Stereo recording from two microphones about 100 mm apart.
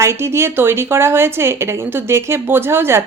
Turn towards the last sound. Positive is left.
turn(degrees=-25)  # may be behind; listen again after turning